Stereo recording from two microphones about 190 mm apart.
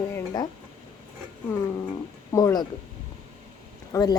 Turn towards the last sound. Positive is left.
turn(degrees=20)  # may be behind; listen again after turning